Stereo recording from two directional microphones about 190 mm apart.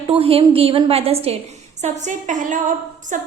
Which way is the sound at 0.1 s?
30° right (ahead or behind).